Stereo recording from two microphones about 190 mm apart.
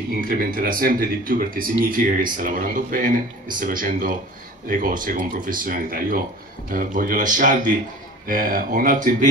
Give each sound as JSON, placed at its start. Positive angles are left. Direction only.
{"t": 0.2, "sound": "speech", "side_deg": -50}